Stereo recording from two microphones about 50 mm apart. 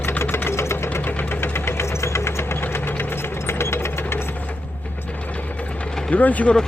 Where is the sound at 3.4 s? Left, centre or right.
Left.